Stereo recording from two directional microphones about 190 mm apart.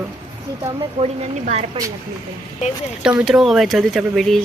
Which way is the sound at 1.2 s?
35° right (ahead or behind).